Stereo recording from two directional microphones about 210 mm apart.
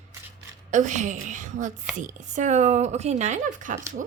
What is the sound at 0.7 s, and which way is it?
Speech, 35° right (ahead or behind).